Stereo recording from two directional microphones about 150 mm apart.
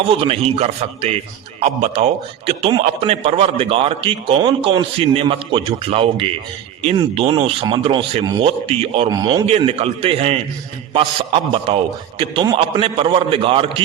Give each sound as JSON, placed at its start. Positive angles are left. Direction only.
{"t": 0.1, "sound": "a man's voice", "side_deg": -40}
{"t": 9.0, "sound": "speech", "side_deg": -30}
{"t": 9.5, "sound": "a man's voice", "side_deg": -40}